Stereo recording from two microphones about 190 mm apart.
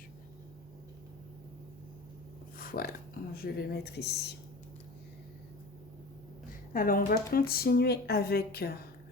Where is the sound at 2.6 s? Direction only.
50° left (ahead or behind).